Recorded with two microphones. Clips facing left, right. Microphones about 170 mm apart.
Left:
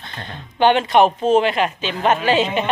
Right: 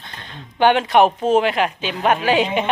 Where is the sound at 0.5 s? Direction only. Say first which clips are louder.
Even; 10° right (ahead or behind).